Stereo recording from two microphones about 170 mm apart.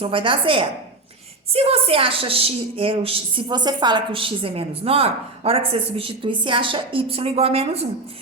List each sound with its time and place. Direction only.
0.0 s a woman's voice: 30° right (ahead or behind)